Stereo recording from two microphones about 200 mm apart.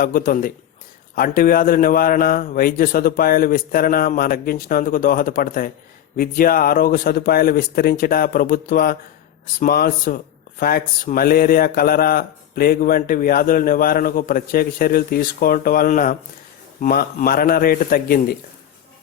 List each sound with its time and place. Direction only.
0.0 s speech: 45° left (ahead or behind)